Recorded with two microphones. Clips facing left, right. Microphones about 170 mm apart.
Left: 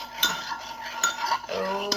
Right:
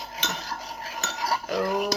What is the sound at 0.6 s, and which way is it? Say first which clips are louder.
Cutlery: right 1 dB; 10° right (ahead or behind).